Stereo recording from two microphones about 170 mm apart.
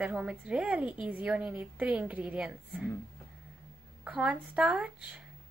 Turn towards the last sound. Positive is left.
turn(degrees=-5)  # may be behind; listen again after turning